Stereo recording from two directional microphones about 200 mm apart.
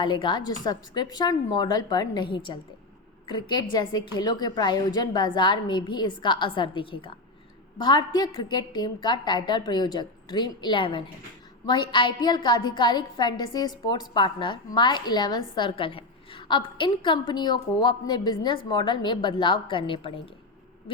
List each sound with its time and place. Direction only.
0.0 s a woman's voice: 25° left (ahead or behind)